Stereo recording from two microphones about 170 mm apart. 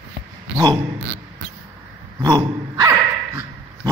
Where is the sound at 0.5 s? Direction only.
25° right (ahead or behind).